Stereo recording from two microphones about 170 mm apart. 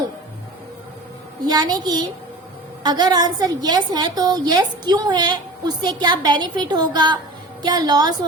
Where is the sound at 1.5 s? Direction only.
25° right (ahead or behind).